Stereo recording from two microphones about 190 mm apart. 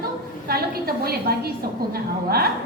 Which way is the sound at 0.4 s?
55° right (ahead or behind).